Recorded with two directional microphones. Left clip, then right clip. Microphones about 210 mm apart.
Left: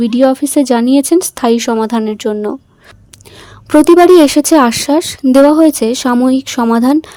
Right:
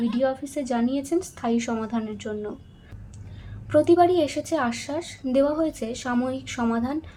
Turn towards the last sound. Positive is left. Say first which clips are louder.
# left 15 dB
turn(degrees=55)  # may be behind; listen again after turning